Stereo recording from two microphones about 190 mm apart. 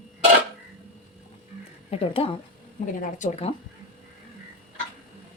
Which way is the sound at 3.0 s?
40° left (ahead or behind).